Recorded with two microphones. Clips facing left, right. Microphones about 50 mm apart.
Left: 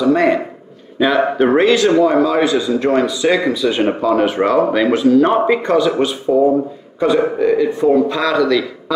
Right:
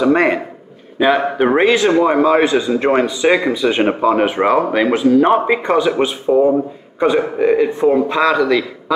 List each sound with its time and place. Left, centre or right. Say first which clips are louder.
0.0 s speech: even; right
1.4 s speech: left 1 dB; centre